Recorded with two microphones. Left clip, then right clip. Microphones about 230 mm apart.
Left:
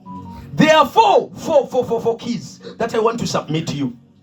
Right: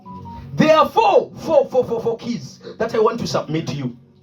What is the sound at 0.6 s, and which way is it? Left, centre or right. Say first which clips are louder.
Speech: left 2 dB; left.